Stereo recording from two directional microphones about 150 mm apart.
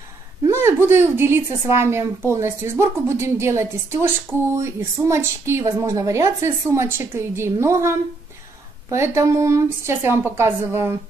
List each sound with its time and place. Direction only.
0.4 s speech: 15° right (ahead or behind)